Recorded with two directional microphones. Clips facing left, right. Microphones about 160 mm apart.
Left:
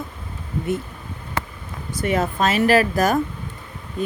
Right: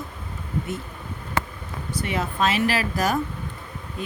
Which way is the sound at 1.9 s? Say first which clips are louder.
Left 6 dB; 45° left (ahead or behind).